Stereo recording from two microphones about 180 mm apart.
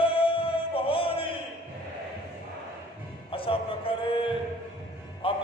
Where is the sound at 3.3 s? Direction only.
30° left (ahead or behind).